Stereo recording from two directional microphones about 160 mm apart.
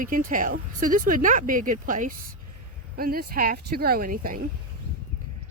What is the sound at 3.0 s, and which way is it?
Speech, 65° right (ahead or behind).